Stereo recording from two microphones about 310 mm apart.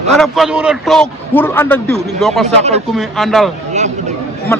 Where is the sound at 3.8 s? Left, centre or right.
Right.